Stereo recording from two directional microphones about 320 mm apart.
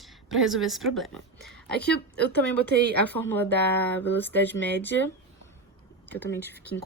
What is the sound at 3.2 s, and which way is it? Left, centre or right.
Speech, centre.